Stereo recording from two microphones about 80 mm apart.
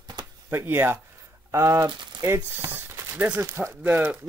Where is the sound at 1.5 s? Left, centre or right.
Right.